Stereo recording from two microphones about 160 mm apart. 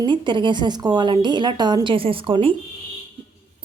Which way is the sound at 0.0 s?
30° right (ahead or behind).